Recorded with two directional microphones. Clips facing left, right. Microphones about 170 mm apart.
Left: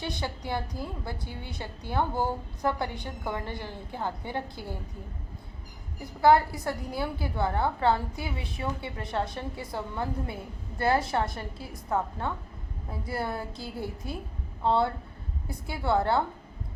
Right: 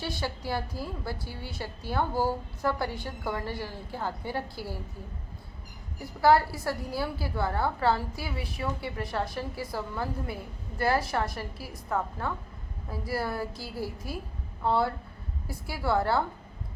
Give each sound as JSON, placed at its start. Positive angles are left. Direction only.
{"t": 0.0, "sound": "a woman's voice", "side_deg": 20}
{"t": 6.0, "sound": "a woman's voice", "side_deg": 20}